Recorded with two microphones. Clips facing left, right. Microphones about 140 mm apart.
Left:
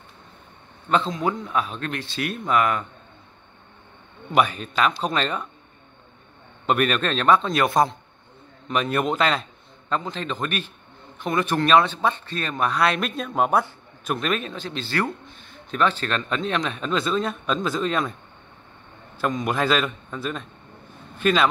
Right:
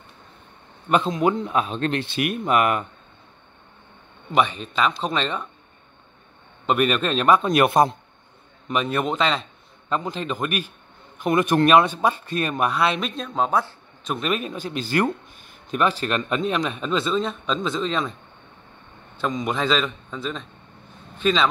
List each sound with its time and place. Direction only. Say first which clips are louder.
0.8 s a man's voice: right 3 dB; 15° right (ahead or behind)
4.3 s speech: even; centre (ahead or behind)
6.6 s speech: right 1 dB; centre (ahead or behind); by 7.9 s 20° right (ahead or behind)
8.6 s a man's voice: even; centre (ahead or behind)
14.1 s speech: even; 5° right (ahead or behind)
19.1 s a man's voice: left 1 dB; 5° left (ahead or behind)